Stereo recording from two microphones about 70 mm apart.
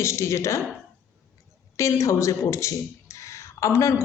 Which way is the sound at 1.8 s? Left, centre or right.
Left.